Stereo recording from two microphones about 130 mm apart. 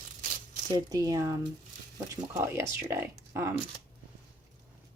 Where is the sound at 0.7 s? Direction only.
25° right (ahead or behind).